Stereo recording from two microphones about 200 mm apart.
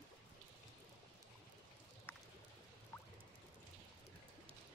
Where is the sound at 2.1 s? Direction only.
10° left (ahead or behind).